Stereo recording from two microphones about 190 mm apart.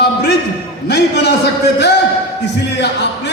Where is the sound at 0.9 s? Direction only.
60° left (ahead or behind).